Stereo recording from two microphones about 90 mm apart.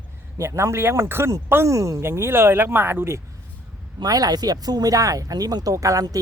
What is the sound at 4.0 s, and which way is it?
Speech, 45° right (ahead or behind).